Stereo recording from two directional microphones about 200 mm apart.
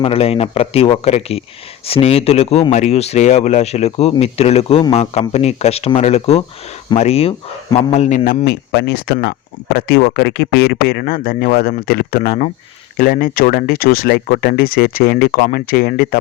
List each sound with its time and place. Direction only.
0.0 s speech: 30° left (ahead or behind)
8.2 s speech: 50° left (ahead or behind)